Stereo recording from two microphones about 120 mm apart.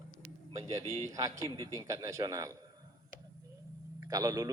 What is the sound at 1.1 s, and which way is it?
A man's voice, 25° right (ahead or behind).